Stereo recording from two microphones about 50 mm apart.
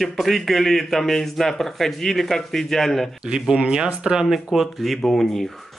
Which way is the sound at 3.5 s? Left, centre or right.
Centre.